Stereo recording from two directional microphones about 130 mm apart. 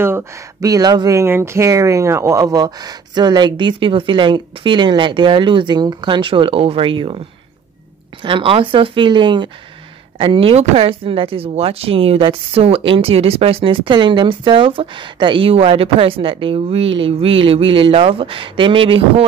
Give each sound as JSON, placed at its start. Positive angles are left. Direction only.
{"t": 0.0, "sound": "speech", "side_deg": -20}
{"t": 8.2, "sound": "speech", "side_deg": -40}